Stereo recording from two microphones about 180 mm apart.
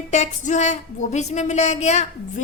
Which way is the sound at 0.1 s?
40° left (ahead or behind).